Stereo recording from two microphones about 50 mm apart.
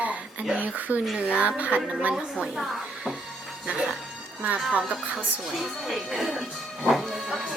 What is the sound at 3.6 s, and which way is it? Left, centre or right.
Speech, centre.